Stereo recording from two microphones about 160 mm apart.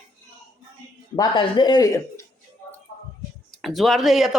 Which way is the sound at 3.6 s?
Centre (ahead or behind).